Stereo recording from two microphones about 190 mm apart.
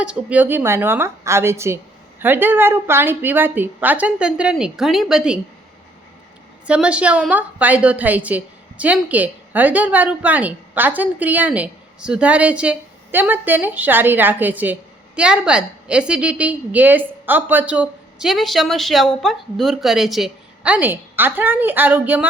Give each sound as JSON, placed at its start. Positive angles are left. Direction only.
{"t": 0.0, "sound": "a woman's voice", "side_deg": -5}
{"t": 6.7, "sound": "a woman's voice", "side_deg": -5}